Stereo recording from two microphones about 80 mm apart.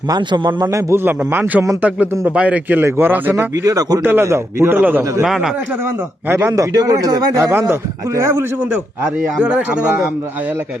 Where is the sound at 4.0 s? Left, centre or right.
Right.